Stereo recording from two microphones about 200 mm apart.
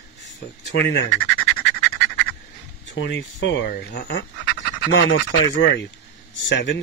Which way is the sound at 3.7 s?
50° left (ahead or behind).